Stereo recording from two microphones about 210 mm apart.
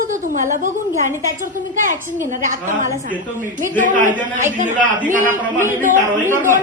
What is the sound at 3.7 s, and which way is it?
A woman's voice, 40° right (ahead or behind).